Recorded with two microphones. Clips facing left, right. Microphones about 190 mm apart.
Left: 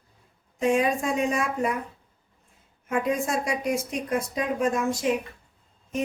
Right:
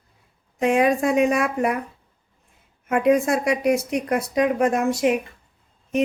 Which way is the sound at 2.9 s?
65° right (ahead or behind).